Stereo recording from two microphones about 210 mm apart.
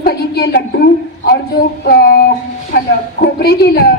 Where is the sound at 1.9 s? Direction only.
45° left (ahead or behind).